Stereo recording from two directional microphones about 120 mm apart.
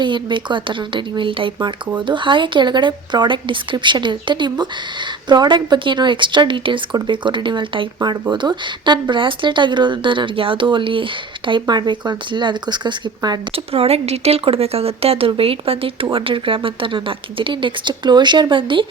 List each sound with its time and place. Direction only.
0.0 s speech: 40° right (ahead or behind)
13.7 s a woman's voice: 55° right (ahead or behind)